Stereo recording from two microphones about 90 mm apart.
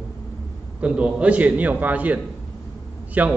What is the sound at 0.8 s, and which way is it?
A man's voice, 15° right (ahead or behind).